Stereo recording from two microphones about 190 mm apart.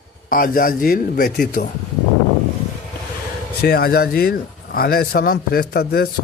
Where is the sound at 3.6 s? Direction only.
55° left (ahead or behind).